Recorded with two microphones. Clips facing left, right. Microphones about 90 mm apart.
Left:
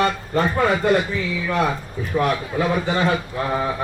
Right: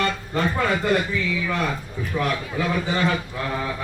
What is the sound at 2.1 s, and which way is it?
A man's voice, 35° left (ahead or behind).